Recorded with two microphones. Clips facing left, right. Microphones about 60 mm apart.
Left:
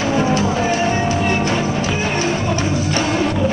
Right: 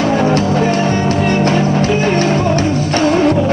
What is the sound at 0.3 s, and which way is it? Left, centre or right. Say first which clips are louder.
Music: right 4 dB; right.